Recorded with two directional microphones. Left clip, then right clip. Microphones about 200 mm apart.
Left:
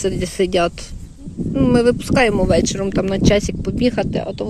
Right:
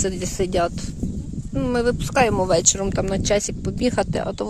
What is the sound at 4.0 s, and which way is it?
Speech, 15° right (ahead or behind).